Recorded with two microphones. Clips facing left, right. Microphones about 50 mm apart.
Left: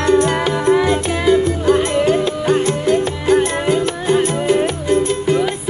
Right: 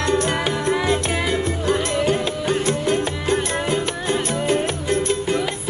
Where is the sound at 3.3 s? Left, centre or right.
Centre.